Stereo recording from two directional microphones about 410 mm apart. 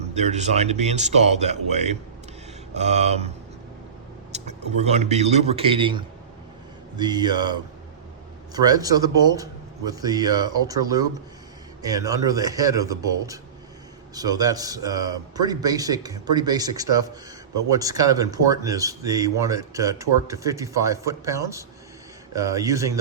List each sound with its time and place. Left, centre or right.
0.0 s speech: centre
4.3 s a sound: centre
4.8 s speech: centre